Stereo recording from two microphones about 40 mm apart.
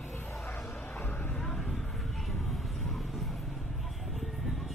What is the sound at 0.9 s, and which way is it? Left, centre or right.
Vehicle, left.